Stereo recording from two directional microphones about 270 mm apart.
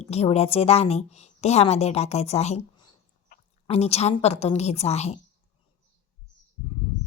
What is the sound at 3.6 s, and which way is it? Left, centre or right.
A woman's voice, left.